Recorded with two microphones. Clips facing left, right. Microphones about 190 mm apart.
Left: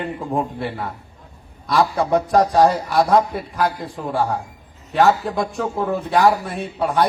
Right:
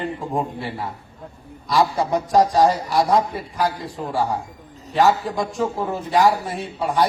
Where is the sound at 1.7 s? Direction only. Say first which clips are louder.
Left 1 dB; 60° left (ahead or behind).